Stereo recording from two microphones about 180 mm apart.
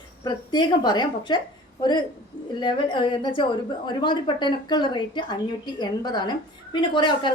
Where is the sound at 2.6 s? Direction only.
25° left (ahead or behind).